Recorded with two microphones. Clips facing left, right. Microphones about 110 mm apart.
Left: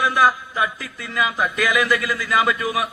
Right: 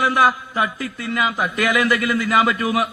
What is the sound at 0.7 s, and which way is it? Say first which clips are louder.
A man's voice: right 2 dB; 55° right (ahead or behind).